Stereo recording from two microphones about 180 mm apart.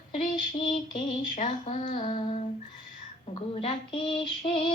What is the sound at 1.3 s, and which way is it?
Speech, 40° left (ahead or behind).